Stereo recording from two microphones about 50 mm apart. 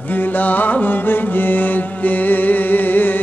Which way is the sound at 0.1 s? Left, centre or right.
Left.